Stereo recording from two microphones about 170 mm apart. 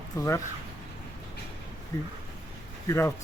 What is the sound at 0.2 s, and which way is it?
Speech, 15° left (ahead or behind).